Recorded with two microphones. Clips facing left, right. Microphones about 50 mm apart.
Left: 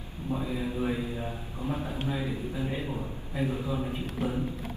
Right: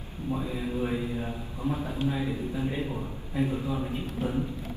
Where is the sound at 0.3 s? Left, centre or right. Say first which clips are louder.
Even; centre.